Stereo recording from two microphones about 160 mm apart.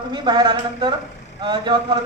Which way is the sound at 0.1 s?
30° right (ahead or behind).